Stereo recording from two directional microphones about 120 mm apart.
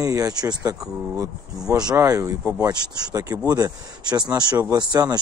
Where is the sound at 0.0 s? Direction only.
30° right (ahead or behind).